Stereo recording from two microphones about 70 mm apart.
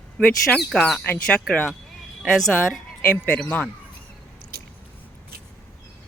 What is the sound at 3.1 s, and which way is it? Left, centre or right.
Speech, centre.